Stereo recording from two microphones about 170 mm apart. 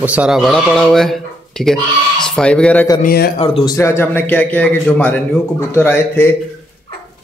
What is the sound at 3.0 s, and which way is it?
Speech, 60° left (ahead or behind).